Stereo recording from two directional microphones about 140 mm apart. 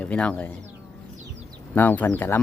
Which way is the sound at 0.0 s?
10° left (ahead or behind).